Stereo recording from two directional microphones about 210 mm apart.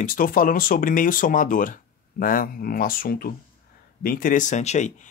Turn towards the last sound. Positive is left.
turn(degrees=35)  # may be behind; listen again after turning